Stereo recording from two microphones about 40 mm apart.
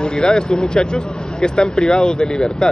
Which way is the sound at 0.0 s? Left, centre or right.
Centre.